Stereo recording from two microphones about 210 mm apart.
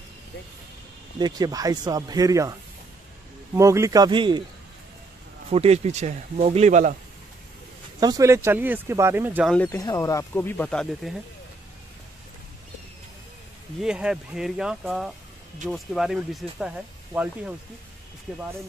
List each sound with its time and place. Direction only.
1.2 s speech: 20° right (ahead or behind)
3.5 s speech: 15° right (ahead or behind)
5.5 s speech: 30° right (ahead or behind)
8.0 s speech: 15° right (ahead or behind)
9.5 s speech: 5° left (ahead or behind)
9.8 s speech: 15° left (ahead or behind)
13.7 s speech: 5° right (ahead or behind)